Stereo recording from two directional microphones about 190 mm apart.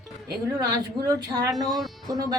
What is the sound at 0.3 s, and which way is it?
Speech, 20° right (ahead or behind).